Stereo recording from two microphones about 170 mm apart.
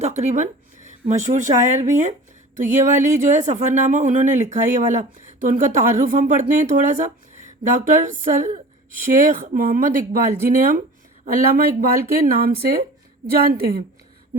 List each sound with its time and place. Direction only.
0.0 s speech: 40° right (ahead or behind); by 13.8 s 65° right (ahead or behind)